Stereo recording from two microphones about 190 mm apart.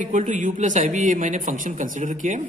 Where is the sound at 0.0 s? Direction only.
40° right (ahead or behind).